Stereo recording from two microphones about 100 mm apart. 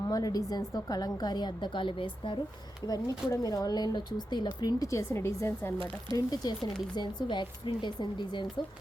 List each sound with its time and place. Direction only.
0.1 s a woman's voice: 35° left (ahead or behind); by 2.4 s 55° left (ahead or behind)
2.8 s speech: 40° left (ahead or behind); by 5.7 s 25° left (ahead or behind)
5.7 s speech: 60° right (ahead or behind)
6.1 s a woman's voice: 40° left (ahead or behind)